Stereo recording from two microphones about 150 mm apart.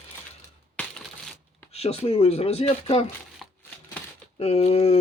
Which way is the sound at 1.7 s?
45° left (ahead or behind).